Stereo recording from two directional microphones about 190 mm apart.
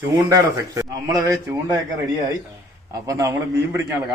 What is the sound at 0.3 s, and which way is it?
A man's voice, 15° right (ahead or behind).